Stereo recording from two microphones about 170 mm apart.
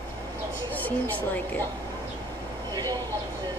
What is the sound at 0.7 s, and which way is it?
Speech, 10° left (ahead or behind).